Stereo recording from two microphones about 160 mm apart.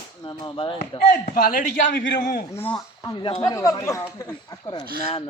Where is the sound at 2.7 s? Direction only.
25° left (ahead or behind).